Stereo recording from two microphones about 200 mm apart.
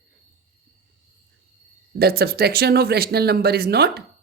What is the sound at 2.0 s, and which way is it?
Speech, 50° right (ahead or behind).